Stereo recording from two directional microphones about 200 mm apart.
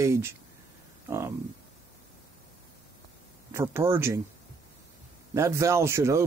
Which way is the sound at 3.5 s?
15° right (ahead or behind).